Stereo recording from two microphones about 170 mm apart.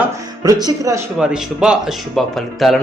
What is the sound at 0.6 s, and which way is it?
Speech, 20° right (ahead or behind).